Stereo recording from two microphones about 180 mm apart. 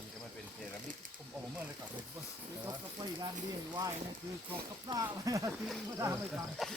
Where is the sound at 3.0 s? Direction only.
20° right (ahead or behind).